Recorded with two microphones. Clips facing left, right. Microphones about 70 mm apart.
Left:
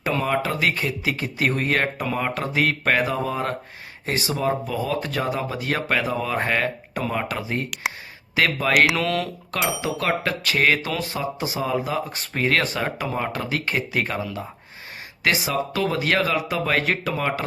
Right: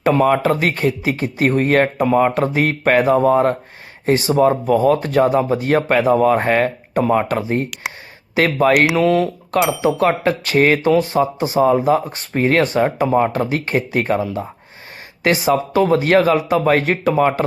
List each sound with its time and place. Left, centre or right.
0.1 s speech: right
9.0 s speech: centre
9.8 s speech: right